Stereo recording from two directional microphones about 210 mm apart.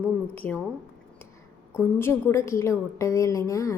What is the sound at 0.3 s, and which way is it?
Speech, 10° left (ahead or behind).